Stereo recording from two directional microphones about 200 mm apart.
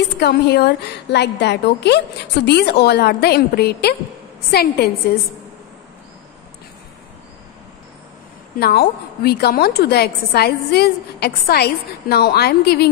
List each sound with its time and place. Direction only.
0.2 s a woman's voice: 55° left (ahead or behind)
8.5 s a woman's voice: 50° left (ahead or behind)